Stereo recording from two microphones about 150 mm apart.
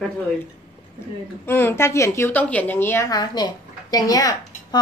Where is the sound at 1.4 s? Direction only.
15° left (ahead or behind).